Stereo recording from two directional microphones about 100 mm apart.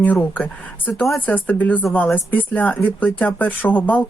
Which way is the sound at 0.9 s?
Centre (ahead or behind).